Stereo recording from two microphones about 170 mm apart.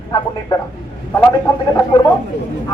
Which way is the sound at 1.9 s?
30° left (ahead or behind).